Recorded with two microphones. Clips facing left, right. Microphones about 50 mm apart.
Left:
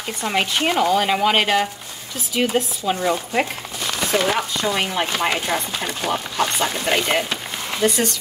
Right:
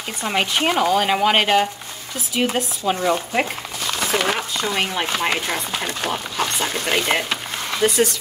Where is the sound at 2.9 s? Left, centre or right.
Centre.